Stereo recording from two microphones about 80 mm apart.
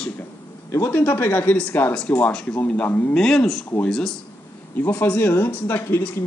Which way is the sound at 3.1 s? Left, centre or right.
Centre.